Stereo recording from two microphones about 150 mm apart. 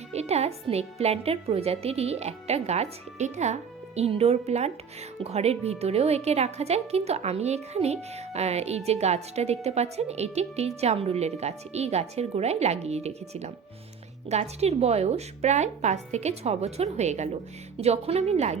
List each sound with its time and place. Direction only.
0.1 s a woman's voice: 45° right (ahead or behind)